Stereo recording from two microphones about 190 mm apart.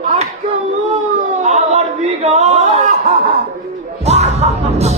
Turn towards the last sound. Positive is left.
turn(degrees=-35)  # may be behind; listen again after turning